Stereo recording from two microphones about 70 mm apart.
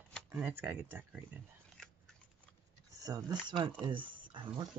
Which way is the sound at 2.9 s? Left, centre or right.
Right.